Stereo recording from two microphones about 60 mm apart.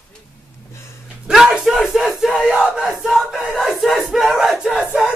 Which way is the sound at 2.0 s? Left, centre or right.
Centre.